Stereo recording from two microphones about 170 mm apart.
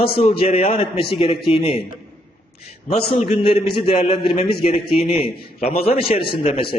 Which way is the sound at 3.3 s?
30° left (ahead or behind).